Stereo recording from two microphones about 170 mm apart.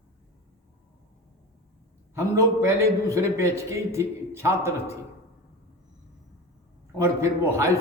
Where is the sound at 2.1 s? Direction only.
20° right (ahead or behind).